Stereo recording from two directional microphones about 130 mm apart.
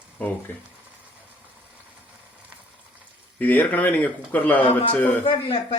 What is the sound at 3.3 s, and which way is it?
Speech, 15° left (ahead or behind).